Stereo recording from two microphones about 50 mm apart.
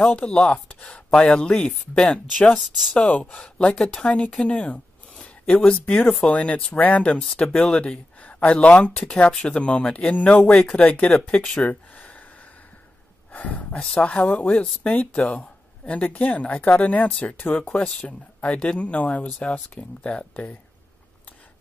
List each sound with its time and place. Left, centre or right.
0.0 s rub: left
0.9 s speech: centre
5.1 s a sound: centre
6.3 s speech: left
7.2 s speech: centre
7.5 s speech: left
11.7 s a sound: left
13.3 s speech: left
17.6 s speech: left